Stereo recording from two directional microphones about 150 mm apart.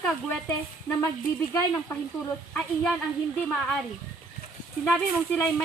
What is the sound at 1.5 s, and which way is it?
Speech, 15° left (ahead or behind).